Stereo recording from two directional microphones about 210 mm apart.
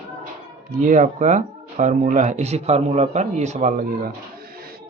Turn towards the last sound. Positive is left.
turn(degrees=-45)  # may be behind; listen again after turning